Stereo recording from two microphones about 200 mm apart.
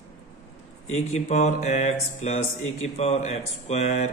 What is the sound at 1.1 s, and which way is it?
A man's voice, 35° left (ahead or behind).